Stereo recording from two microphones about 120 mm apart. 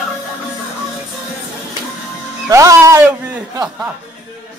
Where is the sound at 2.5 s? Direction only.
25° right (ahead or behind).